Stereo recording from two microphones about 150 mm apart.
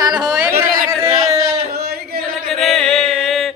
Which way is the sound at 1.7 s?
90° right.